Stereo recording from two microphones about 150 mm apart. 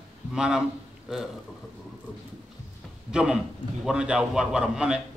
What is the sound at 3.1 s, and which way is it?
A man's voice, 5° right (ahead or behind).